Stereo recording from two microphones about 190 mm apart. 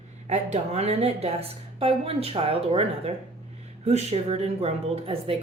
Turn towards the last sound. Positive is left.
turn(degrees=-30)  # may be behind; listen again after turning